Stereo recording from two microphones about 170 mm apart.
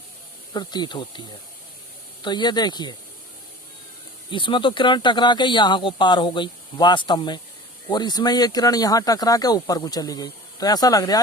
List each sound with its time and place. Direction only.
0.5 s speech: 25° left (ahead or behind)
2.2 s speech: 25° left (ahead or behind)
4.3 s speech: 30° left (ahead or behind)